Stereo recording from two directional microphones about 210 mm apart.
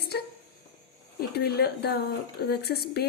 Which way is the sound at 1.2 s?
50° left (ahead or behind).